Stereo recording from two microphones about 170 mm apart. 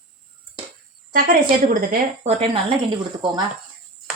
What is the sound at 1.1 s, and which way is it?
A woman's voice, 60° right (ahead or behind).